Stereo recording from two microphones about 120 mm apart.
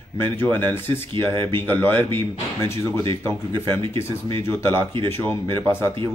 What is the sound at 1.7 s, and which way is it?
Speech, 15° left (ahead or behind).